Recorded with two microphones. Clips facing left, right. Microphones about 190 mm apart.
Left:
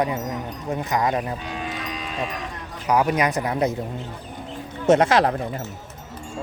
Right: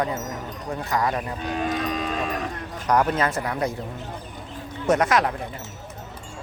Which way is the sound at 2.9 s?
10° left (ahead or behind).